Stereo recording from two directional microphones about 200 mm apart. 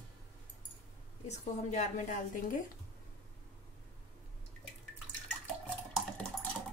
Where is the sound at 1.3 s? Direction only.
35° left (ahead or behind).